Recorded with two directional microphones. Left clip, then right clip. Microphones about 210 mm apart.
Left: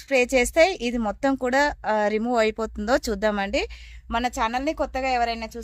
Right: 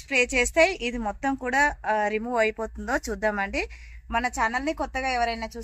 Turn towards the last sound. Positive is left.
turn(degrees=50)  # may be behind; listen again after turning